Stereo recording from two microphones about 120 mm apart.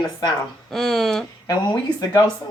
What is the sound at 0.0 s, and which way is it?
Speech, 35° left (ahead or behind).